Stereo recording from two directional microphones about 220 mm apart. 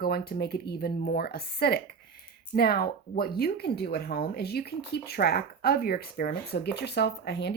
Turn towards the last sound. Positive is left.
turn(degrees=50)  # may be behind; listen again after turning